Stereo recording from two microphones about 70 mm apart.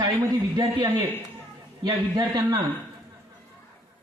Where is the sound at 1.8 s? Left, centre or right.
Right.